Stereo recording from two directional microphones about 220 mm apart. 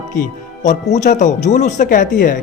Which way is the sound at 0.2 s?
35° left (ahead or behind).